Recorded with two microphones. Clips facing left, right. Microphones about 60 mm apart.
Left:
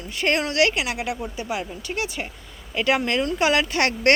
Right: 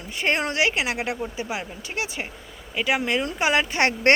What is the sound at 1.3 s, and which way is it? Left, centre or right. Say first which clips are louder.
Speech: left 2 dB; centre.